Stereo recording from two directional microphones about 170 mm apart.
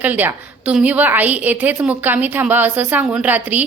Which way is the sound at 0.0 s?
10° right (ahead or behind).